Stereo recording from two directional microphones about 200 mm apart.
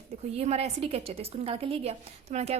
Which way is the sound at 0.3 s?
30° right (ahead or behind).